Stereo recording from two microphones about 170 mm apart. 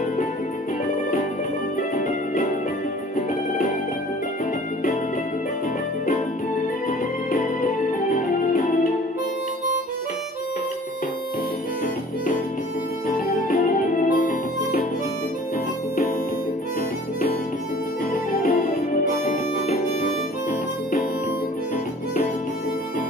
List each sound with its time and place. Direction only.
2.0 s music: 60° left (ahead or behind)
7.3 s music: 50° left (ahead or behind)
13.5 s music: 55° left (ahead or behind)
18.3 s music: 55° left (ahead or behind)